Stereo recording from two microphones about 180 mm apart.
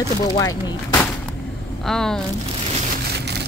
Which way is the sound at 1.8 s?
5° left (ahead or behind).